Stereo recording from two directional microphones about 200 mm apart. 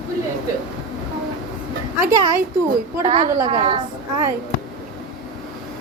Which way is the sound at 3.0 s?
35° right (ahead or behind).